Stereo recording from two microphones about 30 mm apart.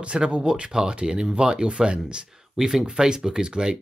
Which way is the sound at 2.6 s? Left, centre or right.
Centre.